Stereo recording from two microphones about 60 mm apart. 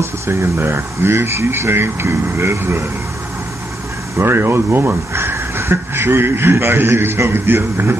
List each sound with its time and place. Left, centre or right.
0.0 s speech: right
4.2 s speech: right